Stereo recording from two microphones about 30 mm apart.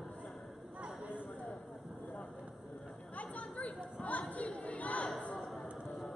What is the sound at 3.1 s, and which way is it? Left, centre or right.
Chatter, left.